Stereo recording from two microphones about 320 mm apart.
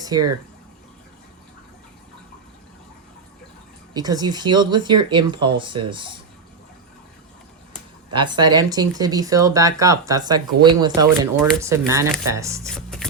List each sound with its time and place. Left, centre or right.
0.0 s speech: centre
3.9 s speech: centre
8.1 s speech: centre
12.6 s a sound: centre